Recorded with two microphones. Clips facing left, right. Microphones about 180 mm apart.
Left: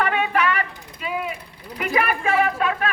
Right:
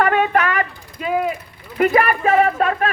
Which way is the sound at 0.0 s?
45° right (ahead or behind).